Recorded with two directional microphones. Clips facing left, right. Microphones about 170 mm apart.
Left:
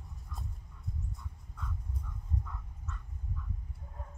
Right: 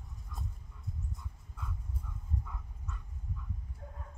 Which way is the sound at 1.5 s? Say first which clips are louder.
Left 1 dB; 10° right (ahead or behind).